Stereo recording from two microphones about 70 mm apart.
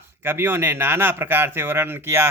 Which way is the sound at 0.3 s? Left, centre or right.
Right.